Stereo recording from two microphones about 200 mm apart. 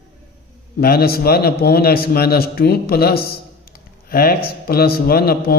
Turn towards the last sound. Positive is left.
turn(degrees=50)  # may be behind; listen again after turning